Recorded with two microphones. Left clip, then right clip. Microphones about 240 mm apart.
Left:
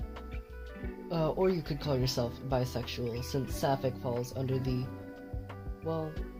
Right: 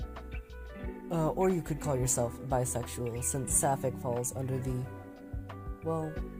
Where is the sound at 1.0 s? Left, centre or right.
Right.